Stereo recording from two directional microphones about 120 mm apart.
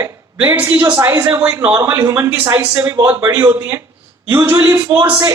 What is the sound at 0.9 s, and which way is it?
A man's voice, 20° right (ahead or behind).